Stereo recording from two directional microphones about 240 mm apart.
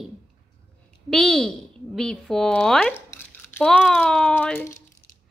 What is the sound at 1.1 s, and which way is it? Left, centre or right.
A woman's voice, centre.